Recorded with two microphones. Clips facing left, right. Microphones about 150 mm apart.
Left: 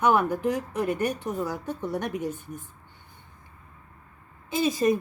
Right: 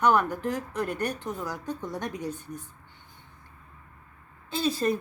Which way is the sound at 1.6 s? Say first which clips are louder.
Left 1 dB; 15° right (ahead or behind).